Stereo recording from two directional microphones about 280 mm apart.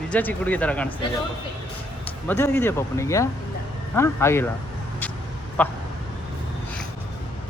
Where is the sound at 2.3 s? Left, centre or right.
Centre.